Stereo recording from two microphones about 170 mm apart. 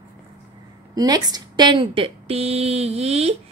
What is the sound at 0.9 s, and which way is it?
A woman's voice, 25° right (ahead or behind).